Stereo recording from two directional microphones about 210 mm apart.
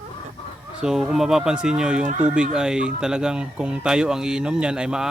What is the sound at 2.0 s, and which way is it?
Speech, 35° right (ahead or behind).